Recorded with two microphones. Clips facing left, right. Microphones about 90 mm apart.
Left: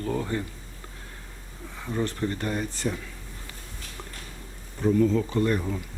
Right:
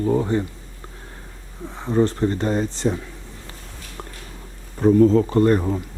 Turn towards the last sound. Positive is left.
turn(degrees=-40)  # may be behind; listen again after turning